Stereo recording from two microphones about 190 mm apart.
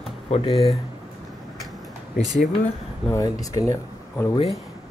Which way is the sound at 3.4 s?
15° left (ahead or behind).